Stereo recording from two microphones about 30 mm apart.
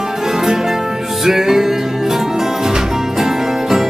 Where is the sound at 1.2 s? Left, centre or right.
Centre.